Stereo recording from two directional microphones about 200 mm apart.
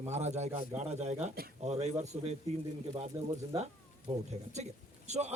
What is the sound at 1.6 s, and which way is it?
Speech, 35° right (ahead or behind).